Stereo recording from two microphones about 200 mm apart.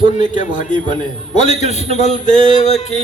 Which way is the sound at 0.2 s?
40° left (ahead or behind).